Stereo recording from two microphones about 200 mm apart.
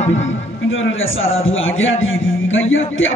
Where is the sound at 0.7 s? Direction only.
75° left (ahead or behind).